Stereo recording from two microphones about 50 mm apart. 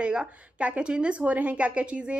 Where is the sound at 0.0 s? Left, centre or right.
Right.